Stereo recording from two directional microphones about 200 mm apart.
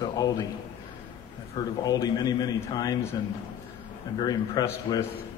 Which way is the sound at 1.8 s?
20° left (ahead or behind).